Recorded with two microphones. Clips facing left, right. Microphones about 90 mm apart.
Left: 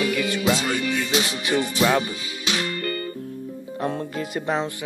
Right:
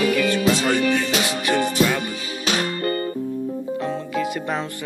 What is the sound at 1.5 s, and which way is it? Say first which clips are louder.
Music: right 1 dB; 50° right (ahead or behind).